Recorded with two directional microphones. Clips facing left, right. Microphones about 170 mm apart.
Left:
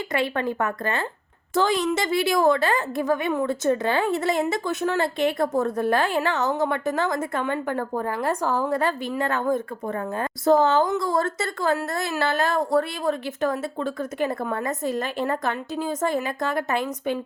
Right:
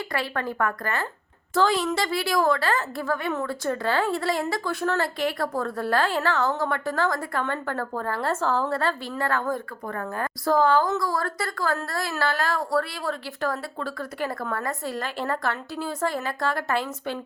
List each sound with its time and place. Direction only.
0.1 s a woman's voice: 20° left (ahead or behind)